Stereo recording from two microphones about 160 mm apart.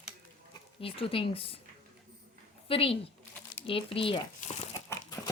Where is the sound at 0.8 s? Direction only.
35° left (ahead or behind).